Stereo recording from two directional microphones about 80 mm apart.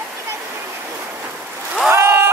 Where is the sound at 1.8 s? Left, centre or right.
Right.